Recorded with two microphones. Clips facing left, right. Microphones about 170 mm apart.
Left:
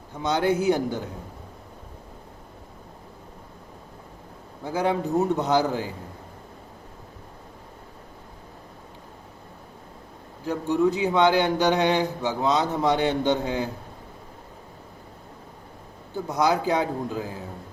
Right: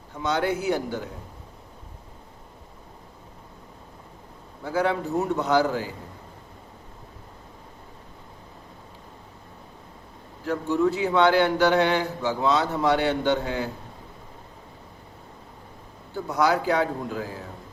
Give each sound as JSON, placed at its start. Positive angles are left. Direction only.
{"t": 0.2, "sound": "a man's voice", "side_deg": 20}
{"t": 4.6, "sound": "a man's voice", "side_deg": 20}
{"t": 10.4, "sound": "speech", "side_deg": 15}
{"t": 16.1, "sound": "a man's voice", "side_deg": 20}